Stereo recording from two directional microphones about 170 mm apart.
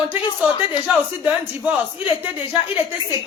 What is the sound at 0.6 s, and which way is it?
Speech, 10° right (ahead or behind).